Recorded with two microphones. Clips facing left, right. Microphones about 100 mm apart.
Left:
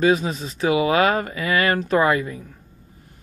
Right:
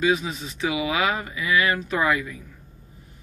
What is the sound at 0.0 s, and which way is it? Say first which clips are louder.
Speech: left 4 dB; 40° left (ahead or behind).